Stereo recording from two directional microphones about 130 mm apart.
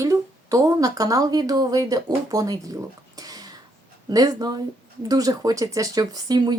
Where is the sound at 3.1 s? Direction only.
30° right (ahead or behind).